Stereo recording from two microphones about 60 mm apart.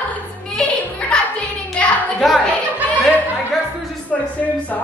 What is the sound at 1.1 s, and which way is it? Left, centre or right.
Hands, centre.